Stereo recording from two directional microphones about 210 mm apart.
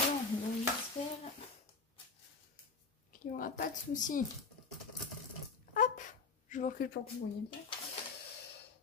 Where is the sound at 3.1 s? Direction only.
40° left (ahead or behind).